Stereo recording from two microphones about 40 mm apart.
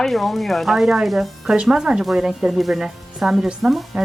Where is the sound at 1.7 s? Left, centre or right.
Centre.